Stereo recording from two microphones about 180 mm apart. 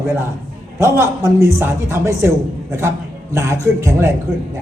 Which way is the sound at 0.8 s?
15° right (ahead or behind).